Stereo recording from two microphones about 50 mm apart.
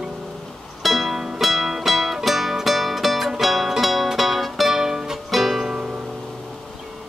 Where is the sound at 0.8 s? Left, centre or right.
Centre.